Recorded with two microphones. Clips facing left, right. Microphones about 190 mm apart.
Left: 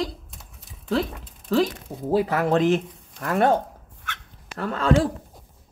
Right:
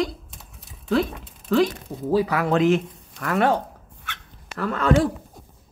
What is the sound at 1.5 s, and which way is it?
Speech, 50° left (ahead or behind).